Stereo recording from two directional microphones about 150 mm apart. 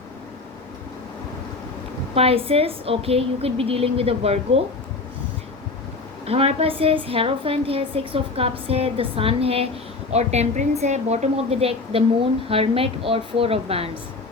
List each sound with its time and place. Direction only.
2.1 s a woman's voice: 40° right (ahead or behind)
6.2 s a woman's voice: 40° right (ahead or behind)